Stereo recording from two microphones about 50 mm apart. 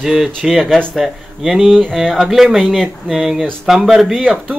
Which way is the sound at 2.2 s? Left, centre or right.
Centre.